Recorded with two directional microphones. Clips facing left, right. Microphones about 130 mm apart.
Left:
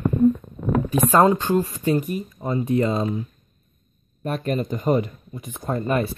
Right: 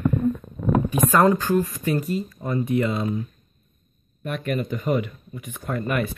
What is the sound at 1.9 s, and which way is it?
Speech, 15° left (ahead or behind).